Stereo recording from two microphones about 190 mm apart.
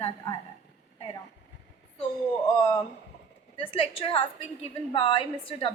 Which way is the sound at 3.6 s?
30° left (ahead or behind).